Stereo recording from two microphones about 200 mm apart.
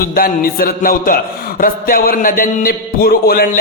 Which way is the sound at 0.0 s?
45° left (ahead or behind).